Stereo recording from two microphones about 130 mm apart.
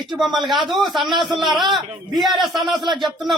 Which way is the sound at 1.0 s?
35° right (ahead or behind).